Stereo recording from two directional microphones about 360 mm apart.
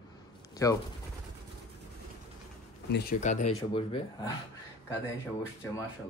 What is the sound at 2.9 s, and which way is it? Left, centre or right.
Speech, left.